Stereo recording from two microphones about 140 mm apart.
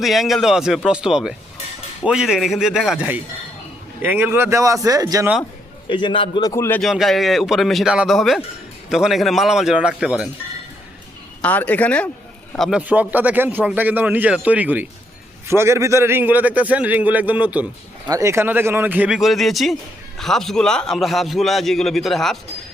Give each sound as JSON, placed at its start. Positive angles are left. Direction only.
{"t": 0.0, "sound": "a man's voice", "side_deg": 0}
{"t": 5.9, "sound": "a man's voice", "side_deg": 35}
{"t": 6.8, "sound": "a man's voice", "side_deg": 0}
{"t": 11.4, "sound": "a man's voice", "side_deg": 10}
{"t": 12.8, "sound": "a man's voice", "side_deg": -10}
{"t": 18.1, "sound": "a man's voice", "side_deg": -20}